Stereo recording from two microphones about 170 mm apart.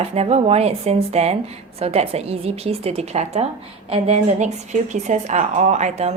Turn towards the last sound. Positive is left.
turn(degrees=-40)  # may be behind; listen again after turning